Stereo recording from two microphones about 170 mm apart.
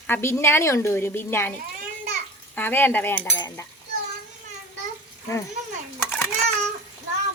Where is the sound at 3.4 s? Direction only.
15° left (ahead or behind).